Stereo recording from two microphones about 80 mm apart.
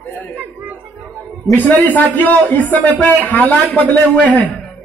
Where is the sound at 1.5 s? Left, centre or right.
Left.